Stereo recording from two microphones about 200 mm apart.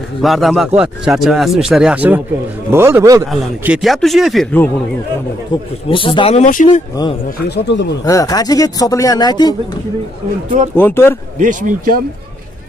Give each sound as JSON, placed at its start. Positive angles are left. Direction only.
{"t": 0.2, "sound": "a man's voice", "side_deg": 0}
{"t": 3.3, "sound": "speech", "side_deg": 0}
{"t": 5.5, "sound": "speech", "side_deg": 25}
{"t": 7.2, "sound": "speech", "side_deg": 55}
{"t": 8.0, "sound": "speech", "side_deg": 15}
{"t": 10.8, "sound": "speech", "side_deg": 10}
{"t": 11.3, "sound": "speech", "side_deg": -40}